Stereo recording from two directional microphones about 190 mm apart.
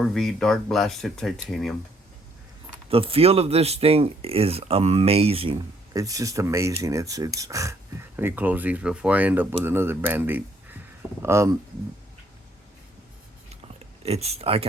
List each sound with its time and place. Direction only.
0.0 s speech: centre (ahead or behind)
2.9 s speech: 30° right (ahead or behind); by 11.5 s 15° right (ahead or behind)
14.0 s speech: 35° right (ahead or behind)